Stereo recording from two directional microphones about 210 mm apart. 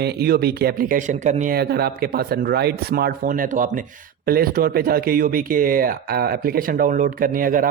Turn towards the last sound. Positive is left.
turn(degrees=-40)  # may be behind; listen again after turning